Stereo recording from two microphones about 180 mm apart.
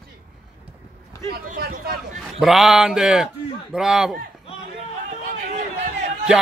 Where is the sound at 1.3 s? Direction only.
60° right (ahead or behind).